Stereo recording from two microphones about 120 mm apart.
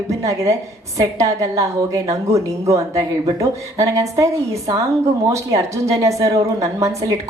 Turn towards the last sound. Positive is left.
turn(degrees=-30)  # may be behind; listen again after turning